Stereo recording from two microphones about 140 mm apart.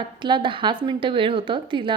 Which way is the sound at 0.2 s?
35° right (ahead or behind).